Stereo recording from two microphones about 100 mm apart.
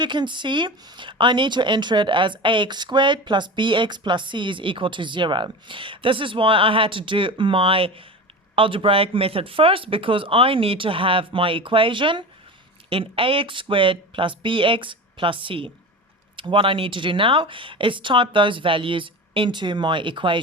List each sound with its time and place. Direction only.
0.0 s speech: 50° right (ahead or behind)